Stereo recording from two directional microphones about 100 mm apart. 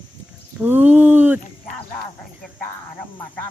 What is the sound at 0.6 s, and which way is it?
Speech, 20° right (ahead or behind).